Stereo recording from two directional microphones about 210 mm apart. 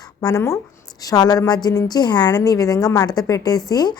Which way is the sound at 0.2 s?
15° left (ahead or behind).